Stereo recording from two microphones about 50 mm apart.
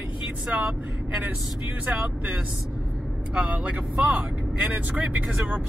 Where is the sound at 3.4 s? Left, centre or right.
Right.